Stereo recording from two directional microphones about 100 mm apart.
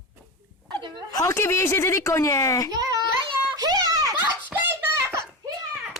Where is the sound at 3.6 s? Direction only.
40° right (ahead or behind).